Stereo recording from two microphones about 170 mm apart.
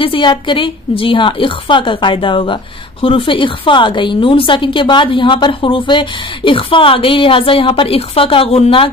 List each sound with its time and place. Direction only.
0.0 s a woman's voice: 30° left (ahead or behind)